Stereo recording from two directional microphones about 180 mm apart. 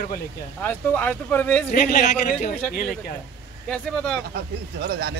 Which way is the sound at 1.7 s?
45° left (ahead or behind).